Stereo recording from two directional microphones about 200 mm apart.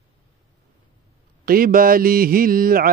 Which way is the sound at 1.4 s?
45° right (ahead or behind).